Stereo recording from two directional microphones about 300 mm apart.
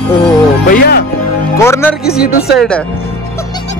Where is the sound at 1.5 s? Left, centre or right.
Centre.